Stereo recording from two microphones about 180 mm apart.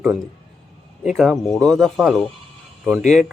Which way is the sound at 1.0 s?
Centre (ahead or behind).